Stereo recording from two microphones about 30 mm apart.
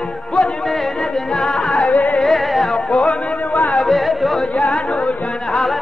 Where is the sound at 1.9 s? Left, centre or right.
Left.